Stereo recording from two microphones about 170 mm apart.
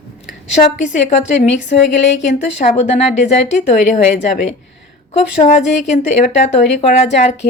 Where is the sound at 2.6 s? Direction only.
45° left (ahead or behind).